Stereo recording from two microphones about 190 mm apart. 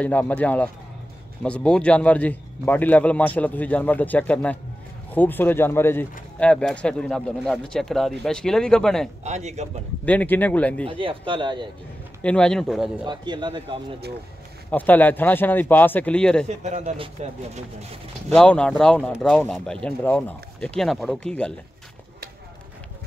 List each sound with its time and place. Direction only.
0.0 s a man's voice: 10° left (ahead or behind)
9.2 s a man's voice: 35° right (ahead or behind)
10.0 s a man's voice: 10° left (ahead or behind)
10.9 s speech: 25° right (ahead or behind)
12.2 s speech: 5° left (ahead or behind)
13.0 s speech: 25° right (ahead or behind)
14.7 s a man's voice: 10° left (ahead or behind)
16.4 s a man's voice: 35° right (ahead or behind)
18.3 s speech: 5° left (ahead or behind)